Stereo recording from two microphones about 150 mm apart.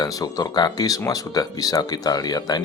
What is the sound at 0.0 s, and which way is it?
Speech, 25° left (ahead or behind).